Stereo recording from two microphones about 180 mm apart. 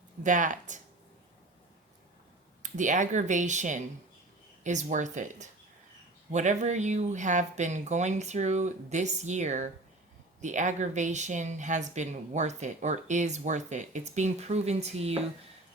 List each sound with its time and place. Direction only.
0.2 s speech: 45° right (ahead or behind)
2.6 s speech: 45° right (ahead or behind)